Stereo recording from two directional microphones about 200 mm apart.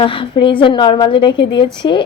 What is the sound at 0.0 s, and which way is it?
A woman's voice, 25° left (ahead or behind).